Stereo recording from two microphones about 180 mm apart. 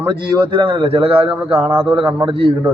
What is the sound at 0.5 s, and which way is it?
A man's voice, 25° right (ahead or behind).